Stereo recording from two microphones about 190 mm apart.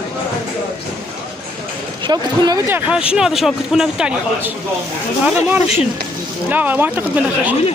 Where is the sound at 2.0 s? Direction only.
20° right (ahead or behind).